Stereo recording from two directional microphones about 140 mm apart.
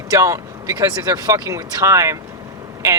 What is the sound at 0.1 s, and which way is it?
Speech, 25° right (ahead or behind).